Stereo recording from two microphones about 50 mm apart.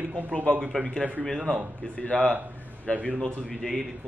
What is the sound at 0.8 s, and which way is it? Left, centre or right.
Speech, right.